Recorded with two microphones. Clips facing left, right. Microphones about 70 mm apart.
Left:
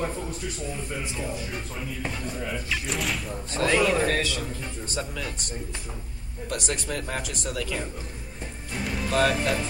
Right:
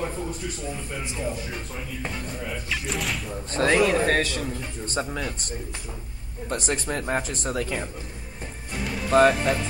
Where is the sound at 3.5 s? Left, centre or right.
Right.